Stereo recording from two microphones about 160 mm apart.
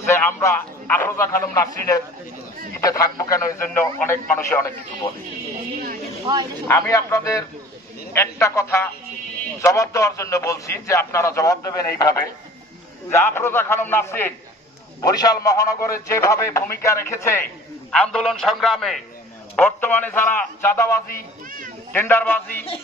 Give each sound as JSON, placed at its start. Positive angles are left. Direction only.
{"t": 0.1, "sound": "a man's voice", "side_deg": 15}
{"t": 6.7, "sound": "a man's voice", "side_deg": 20}
{"t": 17.9, "sound": "a man's voice", "side_deg": 5}
{"t": 19.5, "sound": "speech", "side_deg": 10}